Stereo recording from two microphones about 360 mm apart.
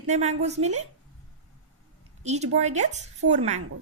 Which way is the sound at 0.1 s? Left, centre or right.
Centre.